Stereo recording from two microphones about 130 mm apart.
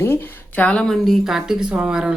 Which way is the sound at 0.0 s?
15° left (ahead or behind).